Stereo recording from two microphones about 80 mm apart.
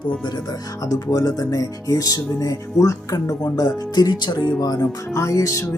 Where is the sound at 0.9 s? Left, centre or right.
Left.